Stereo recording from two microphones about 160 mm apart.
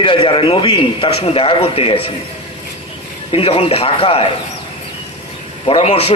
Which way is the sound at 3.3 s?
35° left (ahead or behind).